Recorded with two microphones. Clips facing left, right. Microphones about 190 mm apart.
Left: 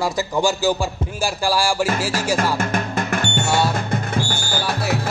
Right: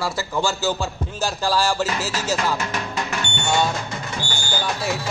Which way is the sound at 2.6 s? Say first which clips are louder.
Left 4 dB; 50° left (ahead or behind).